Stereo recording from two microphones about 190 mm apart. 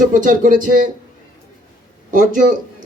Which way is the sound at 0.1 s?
45° right (ahead or behind).